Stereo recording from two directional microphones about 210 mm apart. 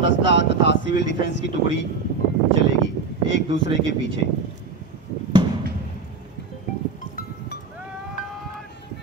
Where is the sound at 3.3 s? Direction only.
55° left (ahead or behind).